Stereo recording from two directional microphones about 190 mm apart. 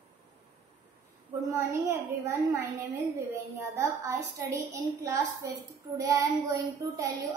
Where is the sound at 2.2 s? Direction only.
15° right (ahead or behind).